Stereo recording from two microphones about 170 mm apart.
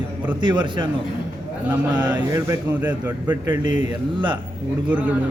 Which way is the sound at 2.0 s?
20° right (ahead or behind).